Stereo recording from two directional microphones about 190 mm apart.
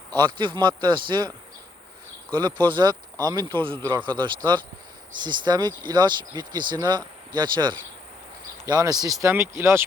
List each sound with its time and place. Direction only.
0.1 s speech: 25° right (ahead or behind)
2.3 s speech: 25° right (ahead or behind)